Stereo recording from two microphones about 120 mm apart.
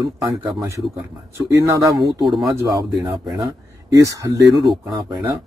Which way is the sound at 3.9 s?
25° right (ahead or behind).